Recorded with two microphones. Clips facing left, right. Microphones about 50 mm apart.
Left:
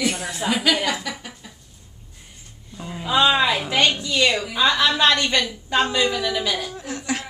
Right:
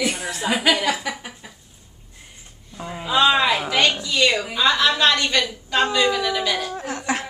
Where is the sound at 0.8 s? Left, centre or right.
Centre.